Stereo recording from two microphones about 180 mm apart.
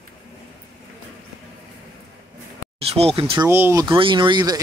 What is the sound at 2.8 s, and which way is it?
Speech, 35° right (ahead or behind).